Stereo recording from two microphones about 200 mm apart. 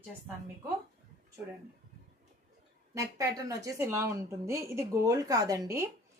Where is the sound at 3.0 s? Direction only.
15° right (ahead or behind).